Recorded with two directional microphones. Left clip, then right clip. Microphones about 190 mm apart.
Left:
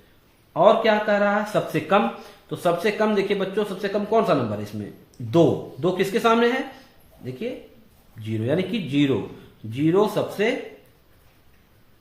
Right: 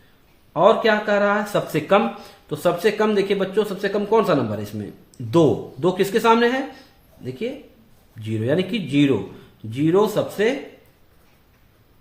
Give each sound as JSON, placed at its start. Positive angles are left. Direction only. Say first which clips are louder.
{"t": 0.5, "sound": "speech", "louder": "right 1 dB", "side_deg": -50}